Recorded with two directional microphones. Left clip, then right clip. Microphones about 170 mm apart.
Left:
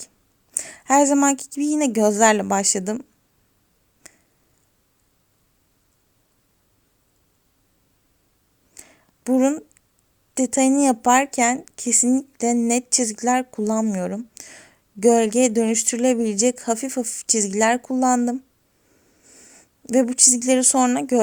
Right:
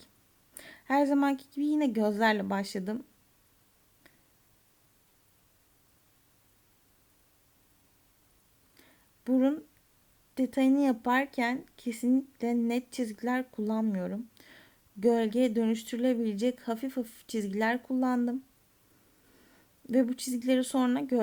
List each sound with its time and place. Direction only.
0.5 s speech: 25° left (ahead or behind)
8.7 s a sound: 25° left (ahead or behind)
10.3 s speech: 25° left (ahead or behind)